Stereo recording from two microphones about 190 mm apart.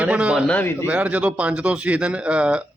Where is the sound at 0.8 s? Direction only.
5° right (ahead or behind).